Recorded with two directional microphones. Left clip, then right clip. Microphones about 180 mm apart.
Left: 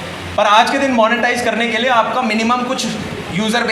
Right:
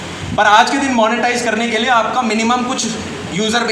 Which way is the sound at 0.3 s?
25° left (ahead or behind).